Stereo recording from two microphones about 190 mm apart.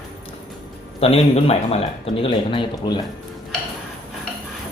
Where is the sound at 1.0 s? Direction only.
30° left (ahead or behind).